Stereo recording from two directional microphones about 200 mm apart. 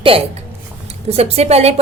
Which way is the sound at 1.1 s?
30° right (ahead or behind).